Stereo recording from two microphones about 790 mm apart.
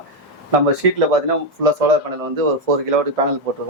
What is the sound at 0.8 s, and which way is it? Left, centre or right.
Speech, right.